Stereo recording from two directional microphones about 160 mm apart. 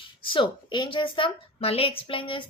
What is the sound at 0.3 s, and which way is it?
Speech, 30° left (ahead or behind).